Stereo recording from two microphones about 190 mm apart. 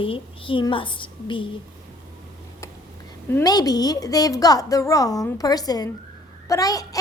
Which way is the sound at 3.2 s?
15° left (ahead or behind).